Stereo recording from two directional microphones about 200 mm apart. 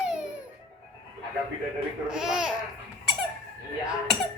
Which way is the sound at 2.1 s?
5° right (ahead or behind).